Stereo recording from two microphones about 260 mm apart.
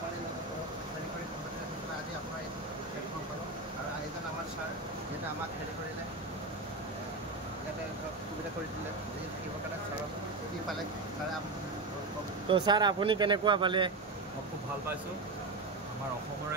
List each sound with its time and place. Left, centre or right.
12.4 s speech: centre